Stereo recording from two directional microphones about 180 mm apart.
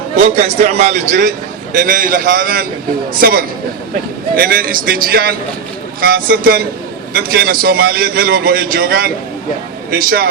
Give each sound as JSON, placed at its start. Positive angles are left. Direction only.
{"t": 0.2, "sound": "a man's voice", "side_deg": -35}